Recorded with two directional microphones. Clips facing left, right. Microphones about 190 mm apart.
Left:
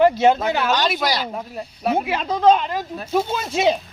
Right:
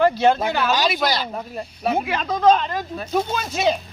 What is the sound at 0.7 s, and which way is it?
Speech, 5° right (ahead or behind).